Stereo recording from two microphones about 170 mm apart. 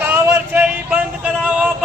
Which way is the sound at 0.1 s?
10° right (ahead or behind).